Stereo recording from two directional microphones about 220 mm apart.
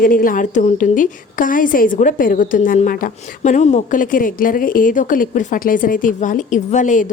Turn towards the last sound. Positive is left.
turn(degrees=35)  # may be behind; listen again after turning